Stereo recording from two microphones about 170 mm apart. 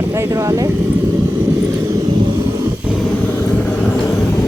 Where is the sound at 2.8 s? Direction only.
Centre (ahead or behind).